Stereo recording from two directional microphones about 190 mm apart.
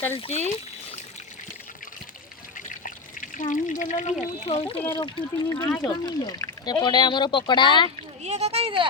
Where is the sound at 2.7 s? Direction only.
45° left (ahead or behind).